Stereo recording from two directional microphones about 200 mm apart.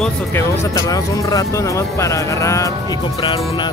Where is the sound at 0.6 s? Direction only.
15° left (ahead or behind).